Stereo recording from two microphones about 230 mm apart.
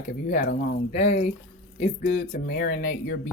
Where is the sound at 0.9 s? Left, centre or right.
Left.